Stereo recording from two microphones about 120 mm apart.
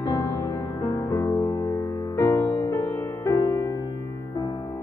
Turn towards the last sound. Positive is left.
turn(degrees=25)  # may be behind; listen again after turning